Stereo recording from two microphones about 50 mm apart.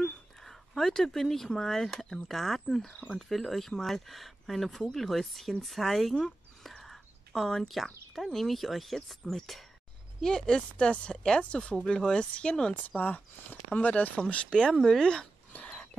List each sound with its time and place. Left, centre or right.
0.0 s speech: centre
6.1 s a sound: centre
8.1 s speech: centre
10.2 s speech: centre
12.8 s speech: left
14.3 s speech: centre
14.7 s speech: centre
15.5 s bird: left